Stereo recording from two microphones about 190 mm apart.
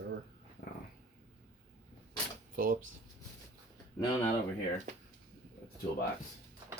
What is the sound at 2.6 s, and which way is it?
Speech, 50° right (ahead or behind).